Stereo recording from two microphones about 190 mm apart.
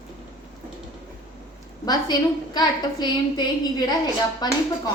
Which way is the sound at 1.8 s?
20° left (ahead or behind).